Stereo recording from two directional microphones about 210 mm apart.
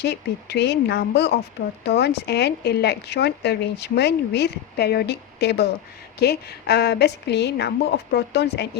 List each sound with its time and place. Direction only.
0.0 s speech: 50° left (ahead or behind)